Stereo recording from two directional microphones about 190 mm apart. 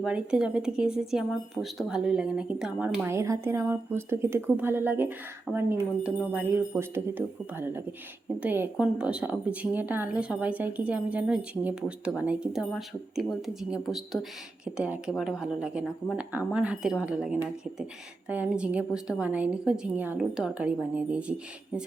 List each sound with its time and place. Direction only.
0.0 s a woman's voice: 5° right (ahead or behind)